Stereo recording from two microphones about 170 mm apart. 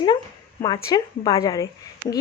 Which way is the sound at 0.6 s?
20° left (ahead or behind).